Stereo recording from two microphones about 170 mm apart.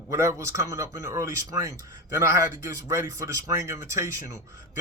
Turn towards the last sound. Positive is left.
turn(degrees=-15)  # may be behind; listen again after turning